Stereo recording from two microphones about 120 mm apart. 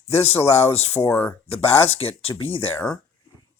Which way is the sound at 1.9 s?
55° left (ahead or behind).